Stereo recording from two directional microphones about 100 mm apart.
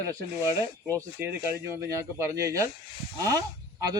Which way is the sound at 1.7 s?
30° right (ahead or behind).